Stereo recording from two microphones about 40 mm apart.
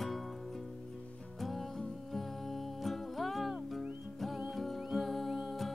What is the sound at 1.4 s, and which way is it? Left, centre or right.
Music, centre.